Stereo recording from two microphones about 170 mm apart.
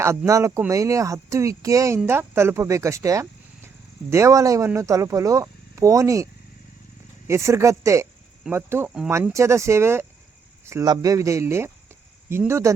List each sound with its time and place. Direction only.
0.3 s speech: 15° right (ahead or behind)
7.3 s speech: 15° right (ahead or behind)